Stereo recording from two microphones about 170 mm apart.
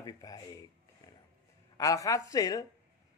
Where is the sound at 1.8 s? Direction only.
20° left (ahead or behind).